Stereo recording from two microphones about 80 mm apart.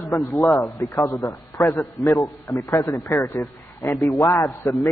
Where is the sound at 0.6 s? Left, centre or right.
Left.